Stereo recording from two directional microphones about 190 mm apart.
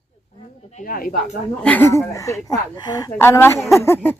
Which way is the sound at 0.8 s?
50° left (ahead or behind).